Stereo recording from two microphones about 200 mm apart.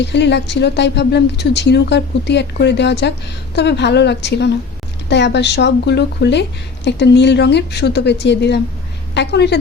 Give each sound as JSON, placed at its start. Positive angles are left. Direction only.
{"t": 0.0, "sound": "speech", "side_deg": 60}